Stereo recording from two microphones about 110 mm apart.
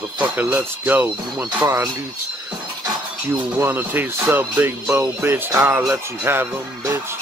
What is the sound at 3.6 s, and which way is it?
Speech, 20° right (ahead or behind).